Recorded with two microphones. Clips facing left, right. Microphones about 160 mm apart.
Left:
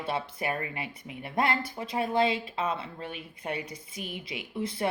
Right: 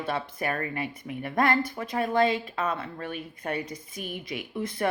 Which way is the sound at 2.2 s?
50° right (ahead or behind).